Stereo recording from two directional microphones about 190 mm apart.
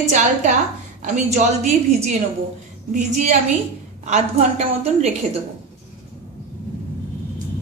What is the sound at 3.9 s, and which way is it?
A woman's voice, 35° right (ahead or behind).